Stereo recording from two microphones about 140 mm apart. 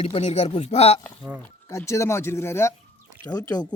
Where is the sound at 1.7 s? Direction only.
20° left (ahead or behind).